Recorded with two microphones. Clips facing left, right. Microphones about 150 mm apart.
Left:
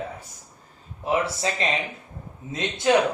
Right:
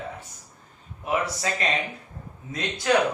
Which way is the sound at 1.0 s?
30° left (ahead or behind).